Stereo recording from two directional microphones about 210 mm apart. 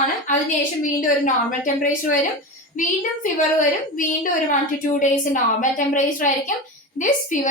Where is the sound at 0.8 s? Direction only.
40° left (ahead or behind).